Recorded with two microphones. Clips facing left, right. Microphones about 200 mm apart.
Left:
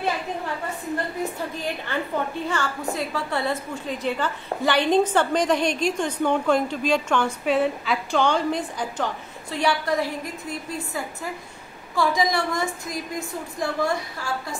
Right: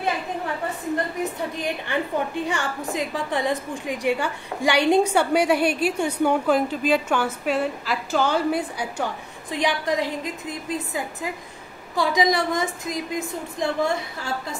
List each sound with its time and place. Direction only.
1.2 s a woman's voice: 15° right (ahead or behind)